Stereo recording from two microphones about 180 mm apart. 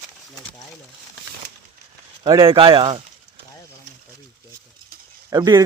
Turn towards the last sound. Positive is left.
turn(degrees=-20)  # may be behind; listen again after turning